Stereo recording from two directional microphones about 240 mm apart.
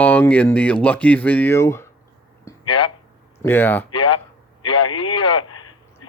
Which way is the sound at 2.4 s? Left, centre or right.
Centre.